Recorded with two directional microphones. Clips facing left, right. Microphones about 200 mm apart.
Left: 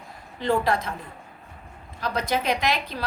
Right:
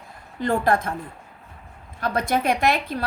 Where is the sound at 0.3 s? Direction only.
50° right (ahead or behind).